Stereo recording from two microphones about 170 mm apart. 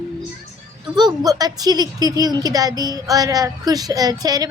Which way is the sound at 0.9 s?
25° right (ahead or behind).